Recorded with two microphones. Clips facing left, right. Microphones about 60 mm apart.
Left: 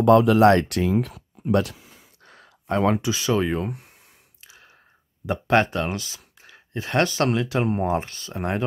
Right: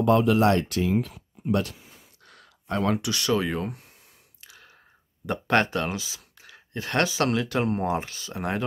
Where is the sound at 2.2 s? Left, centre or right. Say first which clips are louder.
Left 6 dB; left.